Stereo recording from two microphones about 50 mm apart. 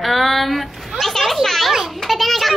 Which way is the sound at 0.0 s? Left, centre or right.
Centre.